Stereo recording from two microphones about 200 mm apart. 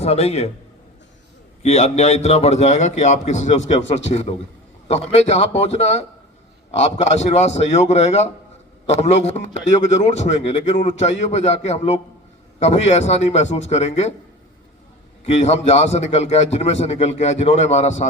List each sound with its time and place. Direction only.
0.0 s a man's voice: 30° left (ahead or behind)
1.6 s a man's voice: 35° left (ahead or behind)
15.4 s a man's voice: 35° left (ahead or behind)